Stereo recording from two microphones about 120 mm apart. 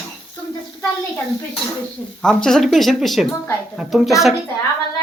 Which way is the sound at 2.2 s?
5° left (ahead or behind).